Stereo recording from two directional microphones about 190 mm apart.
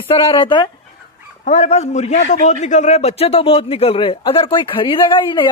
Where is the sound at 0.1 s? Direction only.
25° left (ahead or behind).